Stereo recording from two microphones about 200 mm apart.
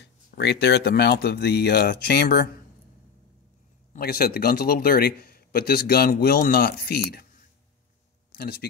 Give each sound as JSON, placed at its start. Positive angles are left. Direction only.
{"t": 0.0, "sound": "speech", "side_deg": 55}
{"t": 3.9, "sound": "a man's voice", "side_deg": 50}
{"t": 8.3, "sound": "speech", "side_deg": 50}